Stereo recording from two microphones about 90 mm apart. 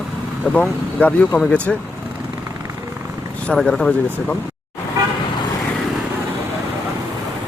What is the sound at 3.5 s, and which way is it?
Speech, 5° left (ahead or behind).